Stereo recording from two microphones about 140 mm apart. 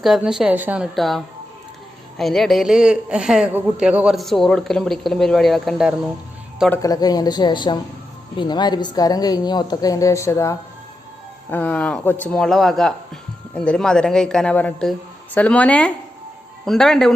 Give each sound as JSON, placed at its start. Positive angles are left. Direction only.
{"t": 0.0, "sound": "a woman's voice", "side_deg": -5}
{"t": 0.9, "sound": "a woman's voice", "side_deg": 0}
{"t": 6.8, "sound": "a woman's voice", "side_deg": 30}